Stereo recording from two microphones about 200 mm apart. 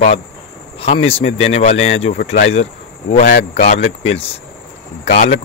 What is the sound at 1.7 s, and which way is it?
Speech, 75° left (ahead or behind).